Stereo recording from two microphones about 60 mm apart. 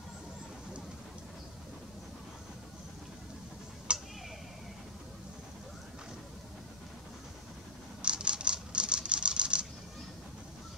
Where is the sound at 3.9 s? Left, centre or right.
Centre.